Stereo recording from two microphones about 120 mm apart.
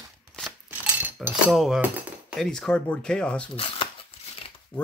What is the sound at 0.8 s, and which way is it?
Cutlery, 15° right (ahead or behind).